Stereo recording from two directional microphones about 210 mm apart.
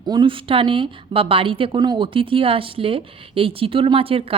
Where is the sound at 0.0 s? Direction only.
20° right (ahead or behind).